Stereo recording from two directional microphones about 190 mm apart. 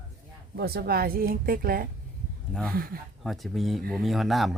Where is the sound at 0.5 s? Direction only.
55° right (ahead or behind).